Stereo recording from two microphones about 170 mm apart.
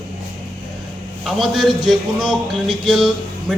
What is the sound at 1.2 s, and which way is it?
A man's voice, centre (ahead or behind).